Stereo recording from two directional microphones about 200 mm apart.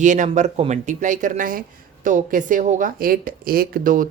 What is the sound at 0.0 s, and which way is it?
Speech, 40° right (ahead or behind).